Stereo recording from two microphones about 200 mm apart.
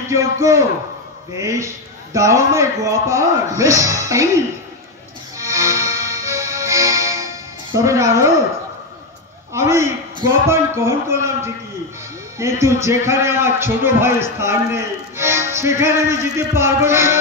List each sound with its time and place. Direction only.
0.1 s a man's voice: 15° right (ahead or behind)
5.4 s music: 15° right (ahead or behind)
9.5 s a sound: 15° right (ahead or behind)
12.4 s a man's voice: 15° right (ahead or behind)